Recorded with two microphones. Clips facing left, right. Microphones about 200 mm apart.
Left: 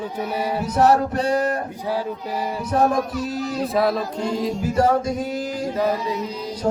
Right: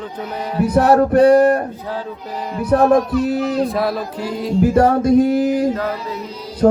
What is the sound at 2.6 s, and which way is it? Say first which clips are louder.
Speech: right 7 dB; 60° right (ahead or behind).